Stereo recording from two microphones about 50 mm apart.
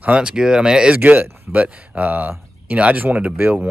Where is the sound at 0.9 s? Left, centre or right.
Right.